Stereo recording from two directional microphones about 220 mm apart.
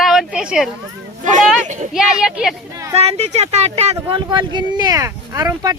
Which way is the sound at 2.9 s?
30° right (ahead or behind).